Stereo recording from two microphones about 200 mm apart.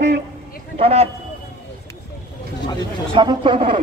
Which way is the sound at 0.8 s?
30° right (ahead or behind).